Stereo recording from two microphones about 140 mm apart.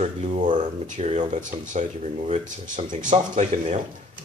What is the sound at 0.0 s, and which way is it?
Speech, 55° right (ahead or behind).